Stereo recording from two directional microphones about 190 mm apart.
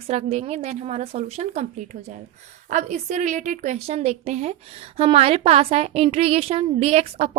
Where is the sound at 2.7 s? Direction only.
40° right (ahead or behind).